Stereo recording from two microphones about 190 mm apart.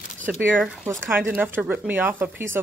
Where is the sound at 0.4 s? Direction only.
10° right (ahead or behind).